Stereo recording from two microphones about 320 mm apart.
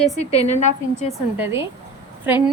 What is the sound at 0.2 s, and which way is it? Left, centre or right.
Speech, centre.